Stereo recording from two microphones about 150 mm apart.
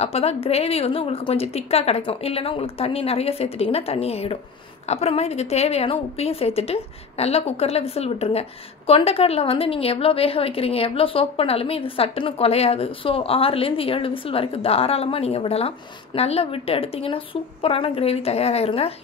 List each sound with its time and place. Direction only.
0.0 s a woman's voice: 40° left (ahead or behind)